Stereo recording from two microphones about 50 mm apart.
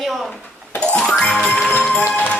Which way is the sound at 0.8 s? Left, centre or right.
Left.